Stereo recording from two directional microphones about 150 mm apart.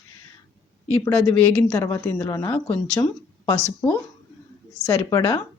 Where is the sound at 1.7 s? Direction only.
20° left (ahead or behind).